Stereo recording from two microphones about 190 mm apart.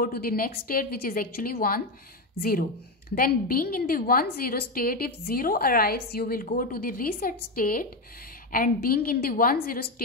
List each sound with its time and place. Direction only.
0.0 s a woman's voice: 50° left (ahead or behind)
3.2 s a woman's voice: 50° left (ahead or behind)